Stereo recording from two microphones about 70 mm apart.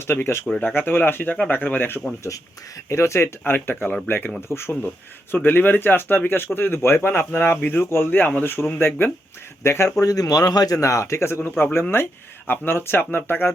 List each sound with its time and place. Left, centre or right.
0.0 s speech: left
2.9 s speech: left
9.6 s speech: left
10.0 s speech: left